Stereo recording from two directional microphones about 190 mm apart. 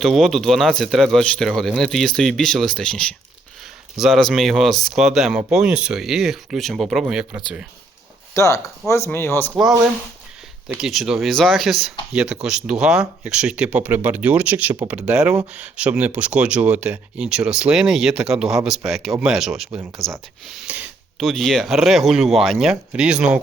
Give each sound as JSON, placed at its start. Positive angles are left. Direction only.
{"t": 0.0, "sound": "speech", "side_deg": 0}
{"t": 8.3, "sound": "speech", "side_deg": 15}
{"t": 10.8, "sound": "speech", "side_deg": 0}